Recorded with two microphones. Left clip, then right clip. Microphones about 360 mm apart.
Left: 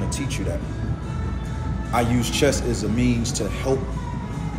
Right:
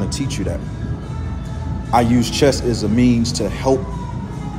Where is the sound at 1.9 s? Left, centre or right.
Centre.